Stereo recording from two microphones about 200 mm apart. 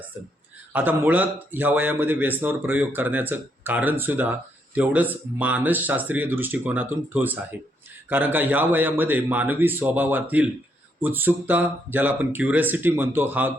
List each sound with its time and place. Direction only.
0.7 s a man's voice: 10° right (ahead or behind)